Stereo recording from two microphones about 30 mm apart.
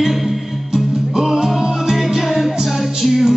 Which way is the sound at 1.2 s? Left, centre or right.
Centre.